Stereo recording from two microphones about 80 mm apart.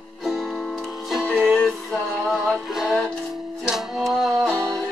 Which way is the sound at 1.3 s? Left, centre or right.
Centre.